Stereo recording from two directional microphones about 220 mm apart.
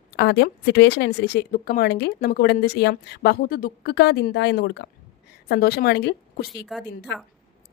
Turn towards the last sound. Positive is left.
turn(degrees=50)  # may be behind; listen again after turning